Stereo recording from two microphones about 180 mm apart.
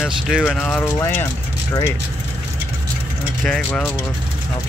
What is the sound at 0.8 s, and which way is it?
Speech, 15° left (ahead or behind).